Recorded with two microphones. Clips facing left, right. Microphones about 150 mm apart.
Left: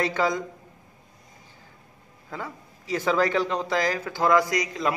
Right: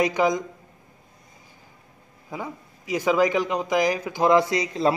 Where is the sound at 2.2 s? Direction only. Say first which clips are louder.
Right 2 dB; 15° right (ahead or behind).